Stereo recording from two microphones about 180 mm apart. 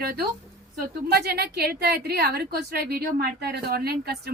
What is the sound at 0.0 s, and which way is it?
A woman's voice, 60° right (ahead or behind).